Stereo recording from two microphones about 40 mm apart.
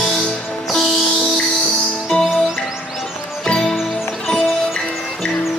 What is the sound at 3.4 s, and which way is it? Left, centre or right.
Music, centre.